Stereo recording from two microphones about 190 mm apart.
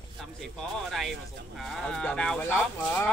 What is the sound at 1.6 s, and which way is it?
Speech, 5° left (ahead or behind).